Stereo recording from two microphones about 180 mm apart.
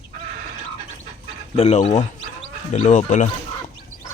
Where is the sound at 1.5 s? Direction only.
40° left (ahead or behind).